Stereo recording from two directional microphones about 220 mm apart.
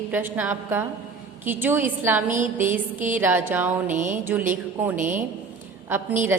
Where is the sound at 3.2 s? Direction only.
10° right (ahead or behind).